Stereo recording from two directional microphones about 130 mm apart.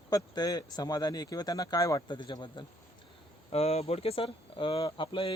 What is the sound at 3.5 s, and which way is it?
Speech, 55° left (ahead or behind).